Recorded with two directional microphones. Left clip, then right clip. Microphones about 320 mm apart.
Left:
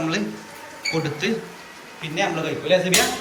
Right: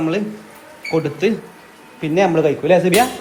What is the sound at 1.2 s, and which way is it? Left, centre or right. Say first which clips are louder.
A man's voice: right 6 dB; centre.